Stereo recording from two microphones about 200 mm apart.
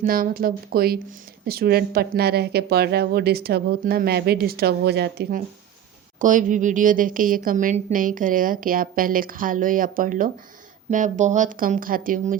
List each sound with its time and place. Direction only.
0.0 s a woman's voice: 45° right (ahead or behind)
6.1 s a woman's voice: 40° right (ahead or behind)